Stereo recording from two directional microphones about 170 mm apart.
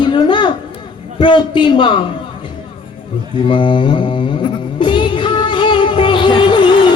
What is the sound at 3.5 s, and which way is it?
Mantra, 30° left (ahead or behind).